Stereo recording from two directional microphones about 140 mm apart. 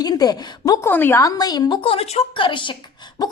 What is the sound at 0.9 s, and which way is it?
Speech, 15° left (ahead or behind).